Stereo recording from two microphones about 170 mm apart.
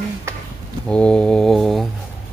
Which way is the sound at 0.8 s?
5° left (ahead or behind).